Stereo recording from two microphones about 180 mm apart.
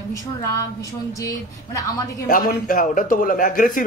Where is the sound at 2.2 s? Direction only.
50° left (ahead or behind).